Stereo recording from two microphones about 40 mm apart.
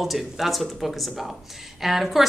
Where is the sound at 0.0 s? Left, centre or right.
Centre.